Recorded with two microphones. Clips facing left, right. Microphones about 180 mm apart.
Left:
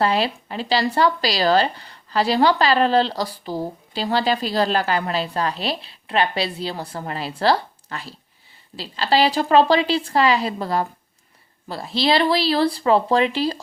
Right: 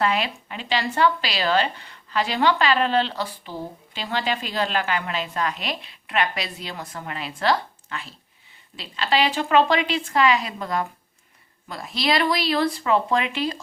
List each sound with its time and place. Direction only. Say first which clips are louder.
0.0 s a woman's voice: left 3 dB; 35° left (ahead or behind)